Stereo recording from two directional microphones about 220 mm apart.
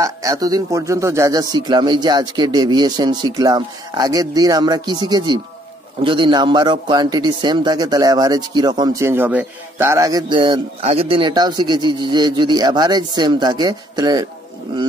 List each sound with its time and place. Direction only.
0.0 s a man's voice: 15° right (ahead or behind)